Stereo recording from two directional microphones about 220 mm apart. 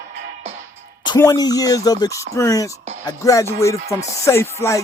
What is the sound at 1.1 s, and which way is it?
Speech, 15° left (ahead or behind).